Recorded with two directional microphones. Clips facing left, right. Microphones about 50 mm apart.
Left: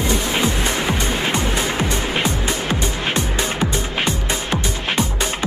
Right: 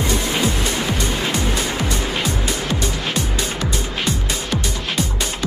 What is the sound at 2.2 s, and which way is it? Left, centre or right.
Music, left.